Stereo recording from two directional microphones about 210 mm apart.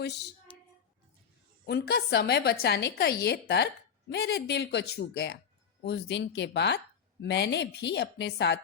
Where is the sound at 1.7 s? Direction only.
50° left (ahead or behind).